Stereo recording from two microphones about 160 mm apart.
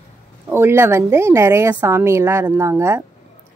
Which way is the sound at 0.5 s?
15° right (ahead or behind).